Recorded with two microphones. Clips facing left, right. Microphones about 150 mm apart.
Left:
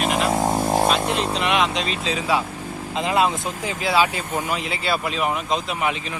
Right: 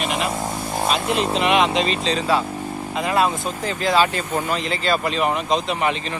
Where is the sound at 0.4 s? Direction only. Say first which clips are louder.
Left 6 dB; 60° left (ahead or behind).